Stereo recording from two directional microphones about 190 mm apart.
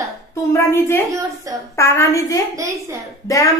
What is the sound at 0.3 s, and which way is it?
Speech, 15° left (ahead or behind).